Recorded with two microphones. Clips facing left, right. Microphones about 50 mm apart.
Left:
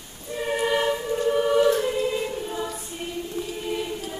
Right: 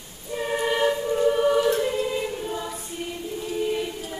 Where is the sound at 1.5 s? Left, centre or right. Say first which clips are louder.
Left 1 dB; centre.